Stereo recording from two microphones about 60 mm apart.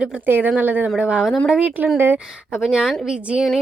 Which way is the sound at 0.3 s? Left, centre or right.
Right.